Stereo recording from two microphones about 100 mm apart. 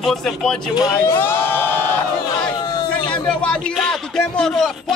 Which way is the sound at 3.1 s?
10° left (ahead or behind).